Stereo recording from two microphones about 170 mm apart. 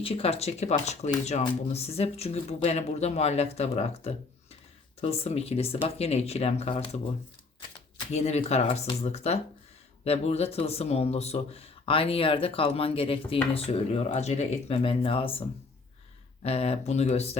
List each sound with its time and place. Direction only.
0.0 s speech: 35° left (ahead or behind)
8.1 s speech: 40° left (ahead or behind)